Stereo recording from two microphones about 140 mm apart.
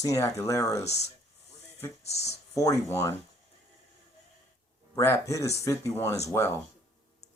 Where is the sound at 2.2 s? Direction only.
25° left (ahead or behind).